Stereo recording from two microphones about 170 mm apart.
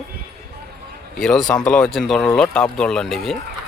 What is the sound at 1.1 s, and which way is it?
A man's voice, 5° left (ahead or behind).